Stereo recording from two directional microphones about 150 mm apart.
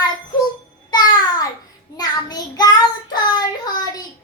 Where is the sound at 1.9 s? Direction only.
25° left (ahead or behind).